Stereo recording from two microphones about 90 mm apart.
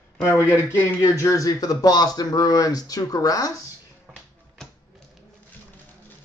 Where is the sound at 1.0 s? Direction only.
35° left (ahead or behind).